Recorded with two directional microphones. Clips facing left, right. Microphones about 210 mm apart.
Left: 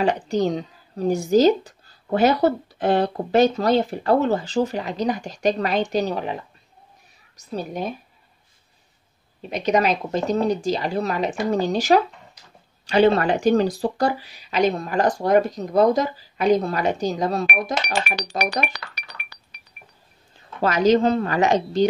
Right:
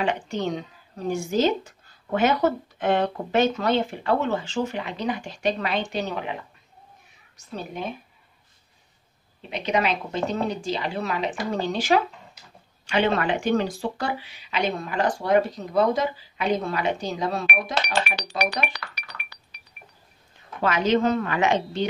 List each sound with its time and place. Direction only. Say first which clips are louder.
0.0 s speech: left 5 dB; 40° left (ahead or behind)
7.5 s speech: left 5 dB; 40° left (ahead or behind)
9.5 s speech: left 4 dB; 40° left (ahead or behind)
20.6 s speech: left 4 dB; 40° left (ahead or behind)